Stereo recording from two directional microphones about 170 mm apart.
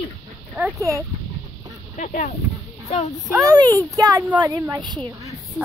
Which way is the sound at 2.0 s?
45° left (ahead or behind).